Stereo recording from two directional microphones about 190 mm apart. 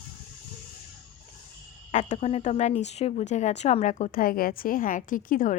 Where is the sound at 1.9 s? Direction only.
40° left (ahead or behind).